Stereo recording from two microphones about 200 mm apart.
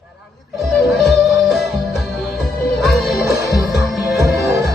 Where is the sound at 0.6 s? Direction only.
Centre (ahead or behind).